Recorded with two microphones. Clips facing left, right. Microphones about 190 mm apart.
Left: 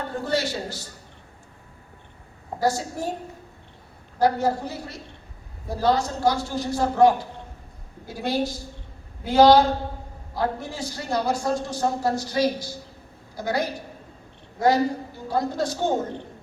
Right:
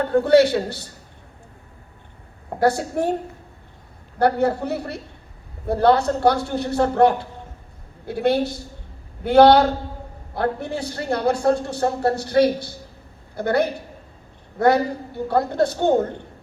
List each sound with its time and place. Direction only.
0.0 s a woman's voice: 60° right (ahead or behind)
2.6 s a woman's voice: 60° right (ahead or behind)
4.2 s a woman's voice: 60° right (ahead or behind)